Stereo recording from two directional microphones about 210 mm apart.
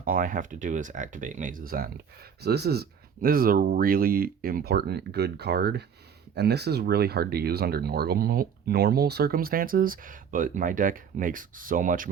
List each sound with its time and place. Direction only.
0.0 s speech: 40° right (ahead or behind)